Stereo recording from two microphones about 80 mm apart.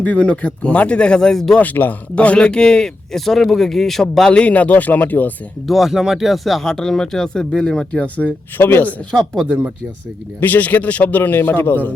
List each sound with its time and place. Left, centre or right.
0.0 s speech: centre
1.5 s speech: left
5.6 s a man's voice: centre; by 9.0 s left
10.4 s a man's voice: left